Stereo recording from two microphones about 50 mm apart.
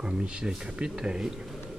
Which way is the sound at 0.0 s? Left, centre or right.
Centre.